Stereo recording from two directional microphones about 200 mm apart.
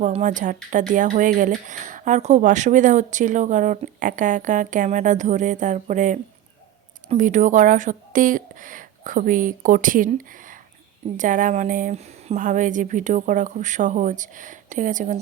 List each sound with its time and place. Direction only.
0.0 s speech: 35° right (ahead or behind)